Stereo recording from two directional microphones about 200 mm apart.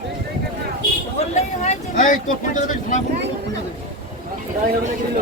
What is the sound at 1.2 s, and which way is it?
Speech, 35° left (ahead or behind).